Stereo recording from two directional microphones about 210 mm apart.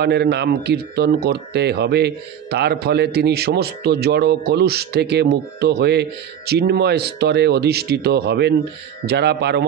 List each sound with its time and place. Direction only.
0.0 s speech: 50° right (ahead or behind)